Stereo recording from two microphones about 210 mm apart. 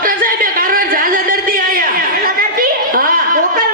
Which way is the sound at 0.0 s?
40° right (ahead or behind).